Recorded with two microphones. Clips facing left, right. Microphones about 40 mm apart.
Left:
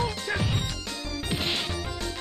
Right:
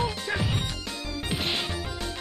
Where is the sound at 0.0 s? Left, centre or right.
Centre.